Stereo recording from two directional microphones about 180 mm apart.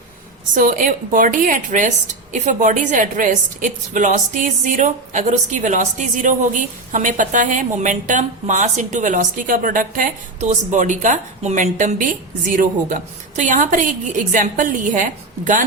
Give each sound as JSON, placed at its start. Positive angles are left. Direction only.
{"t": 0.5, "sound": "a woman's voice", "side_deg": -50}